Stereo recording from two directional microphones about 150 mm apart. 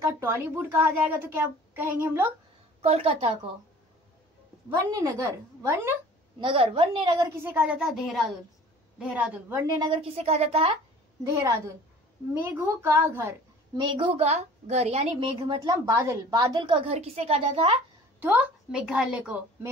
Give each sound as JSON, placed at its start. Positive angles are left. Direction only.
{"t": 0.0, "sound": "a woman's voice", "side_deg": -15}
{"t": 2.8, "sound": "a woman's voice", "side_deg": -45}
{"t": 4.7, "sound": "a woman's voice", "side_deg": -20}
{"t": 6.4, "sound": "a woman's voice", "side_deg": -40}
{"t": 7.4, "sound": "a woman's voice", "side_deg": -10}
{"t": 9.8, "sound": "a woman's voice", "side_deg": -30}
{"t": 10.1, "sound": "a woman's voice", "side_deg": -45}
{"t": 11.2, "sound": "a woman's voice", "side_deg": -20}
{"t": 13.7, "sound": "a woman's voice", "side_deg": -35}
{"t": 15.4, "sound": "a woman's voice", "side_deg": -25}
{"t": 18.2, "sound": "a woman's voice", "side_deg": -10}